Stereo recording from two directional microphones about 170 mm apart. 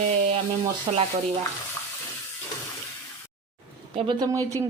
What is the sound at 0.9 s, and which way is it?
Speech, 30° right (ahead or behind).